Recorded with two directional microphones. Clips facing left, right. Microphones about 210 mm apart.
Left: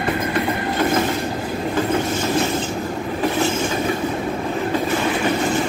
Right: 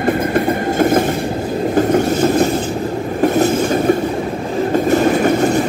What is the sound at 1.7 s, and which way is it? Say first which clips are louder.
Vehicle: right 7 dB; 45° right (ahead or behind).